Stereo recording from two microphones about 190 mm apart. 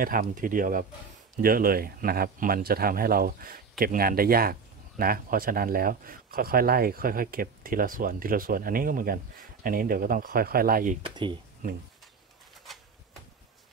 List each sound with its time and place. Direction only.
0.0 s speech: 45° right (ahead or behind)
11.0 s speech: 25° right (ahead or behind)